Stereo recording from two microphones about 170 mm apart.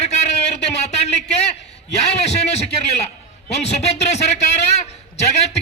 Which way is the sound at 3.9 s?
40° left (ahead or behind).